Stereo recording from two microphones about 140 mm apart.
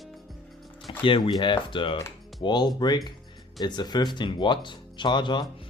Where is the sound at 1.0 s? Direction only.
35° left (ahead or behind).